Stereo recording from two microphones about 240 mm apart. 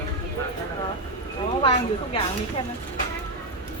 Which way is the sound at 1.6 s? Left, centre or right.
Left.